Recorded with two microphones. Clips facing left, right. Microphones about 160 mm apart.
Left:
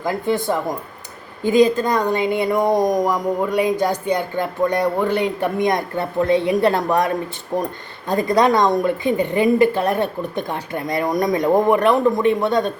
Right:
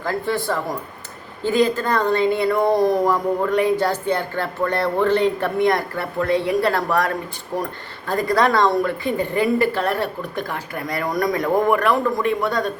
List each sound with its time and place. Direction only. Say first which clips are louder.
0.0 s a woman's voice: left 2 dB; 20° left (ahead or behind)